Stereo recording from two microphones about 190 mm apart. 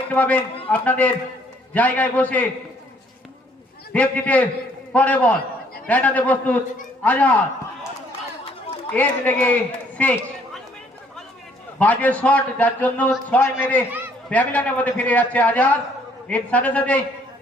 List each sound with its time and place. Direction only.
0.1 s a man's voice: 10° left (ahead or behind)
3.9 s a man's voice: 10° left (ahead or behind)
8.9 s a man's voice: 10° left (ahead or behind)
10.0 s run: 10° left (ahead or behind)
11.8 s a man's voice: 10° left (ahead or behind)